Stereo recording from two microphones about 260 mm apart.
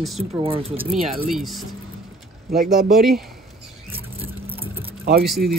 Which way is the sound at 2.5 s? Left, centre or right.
Right.